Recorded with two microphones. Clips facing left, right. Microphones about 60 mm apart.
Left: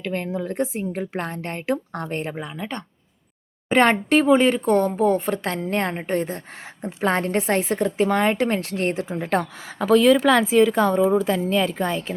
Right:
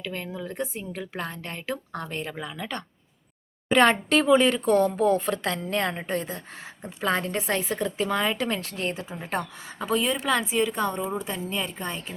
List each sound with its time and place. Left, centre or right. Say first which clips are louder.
0.0 s a woman's voice: left 7 dB; left
2.3 s a woman's voice: left 3 dB; left